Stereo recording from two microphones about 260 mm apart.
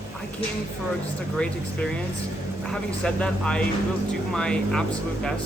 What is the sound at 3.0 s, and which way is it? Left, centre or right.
Speech, centre.